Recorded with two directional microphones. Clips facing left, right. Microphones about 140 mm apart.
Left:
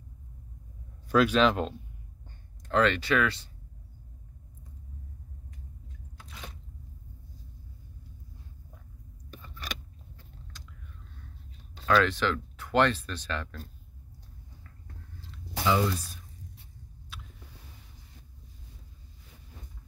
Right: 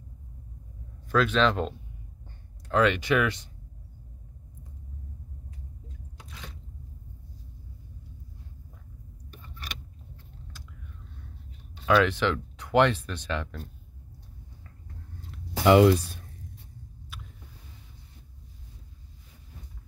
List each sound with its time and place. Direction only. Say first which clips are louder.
1.0 s speech: left 1 dB; 10° left (ahead or behind)
2.7 s speech: right 2 dB; 10° right (ahead or behind)
11.8 s speech: right 2 dB; 10° right (ahead or behind)
15.3 s a sound: right 8 dB; 70° right (ahead or behind)